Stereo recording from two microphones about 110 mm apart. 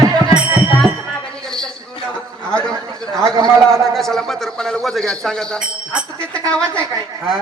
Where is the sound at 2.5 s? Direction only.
10° left (ahead or behind).